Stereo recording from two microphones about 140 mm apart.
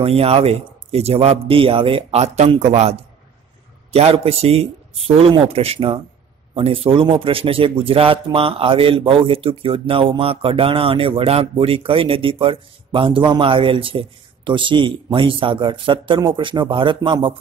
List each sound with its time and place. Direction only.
0.0 s a man's voice: 45° right (ahead or behind)